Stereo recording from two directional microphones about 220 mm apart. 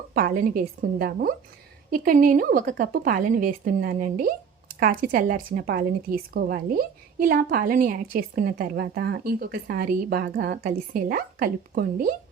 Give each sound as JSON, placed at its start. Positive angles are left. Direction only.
{"t": 0.1, "sound": "a woman's voice", "side_deg": -40}